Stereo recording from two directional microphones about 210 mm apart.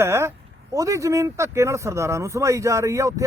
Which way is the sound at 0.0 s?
10° right (ahead or behind).